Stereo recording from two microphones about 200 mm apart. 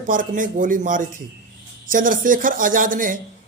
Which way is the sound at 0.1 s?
40° right (ahead or behind).